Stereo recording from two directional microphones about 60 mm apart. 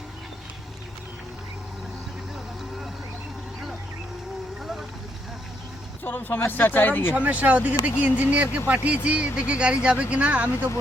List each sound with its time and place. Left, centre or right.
6.1 s speech: left
7.1 s speech: right